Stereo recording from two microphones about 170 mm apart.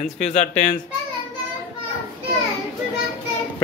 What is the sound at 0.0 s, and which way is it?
Speech, 45° left (ahead or behind).